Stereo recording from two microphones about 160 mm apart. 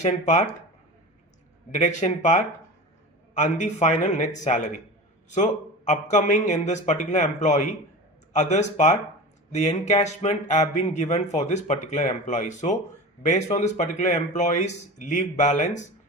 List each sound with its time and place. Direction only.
0.0 s speech: 45° left (ahead or behind)
1.7 s speech: 50° left (ahead or behind)